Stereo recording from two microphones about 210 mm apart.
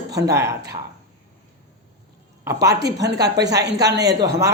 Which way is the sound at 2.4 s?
15° right (ahead or behind).